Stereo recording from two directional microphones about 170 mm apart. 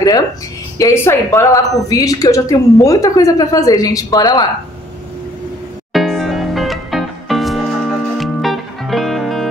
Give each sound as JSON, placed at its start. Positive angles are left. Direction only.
{"t": 0.7, "sound": "a woman's voice", "side_deg": 15}
{"t": 5.9, "sound": "music", "side_deg": 0}